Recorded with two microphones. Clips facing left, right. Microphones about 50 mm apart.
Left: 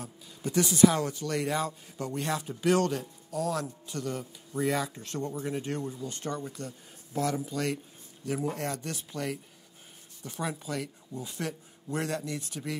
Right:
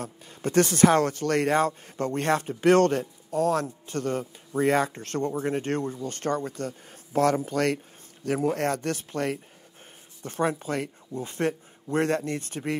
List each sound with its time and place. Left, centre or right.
0.0 s a man's voice: right